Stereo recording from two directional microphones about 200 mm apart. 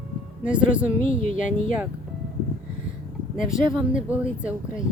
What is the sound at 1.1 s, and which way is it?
Speech, 40° left (ahead or behind).